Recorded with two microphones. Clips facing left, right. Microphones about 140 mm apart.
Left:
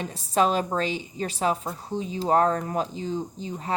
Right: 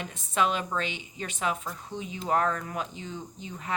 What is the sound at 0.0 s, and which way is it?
A woman's voice, 35° left (ahead or behind).